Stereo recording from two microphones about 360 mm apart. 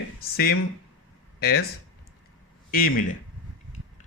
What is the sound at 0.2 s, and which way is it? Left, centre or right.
Speech, left.